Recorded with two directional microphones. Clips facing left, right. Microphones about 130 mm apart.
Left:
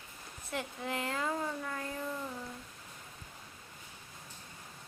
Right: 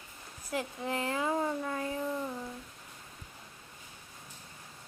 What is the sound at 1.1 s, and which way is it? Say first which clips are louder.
Speech: right 4 dB; 15° right (ahead or behind).